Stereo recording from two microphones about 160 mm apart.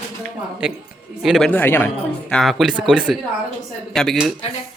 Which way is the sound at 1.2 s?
Centre (ahead or behind).